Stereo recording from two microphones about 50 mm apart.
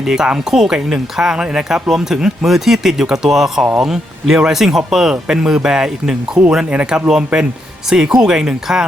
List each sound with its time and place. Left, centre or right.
0.5 s speech: centre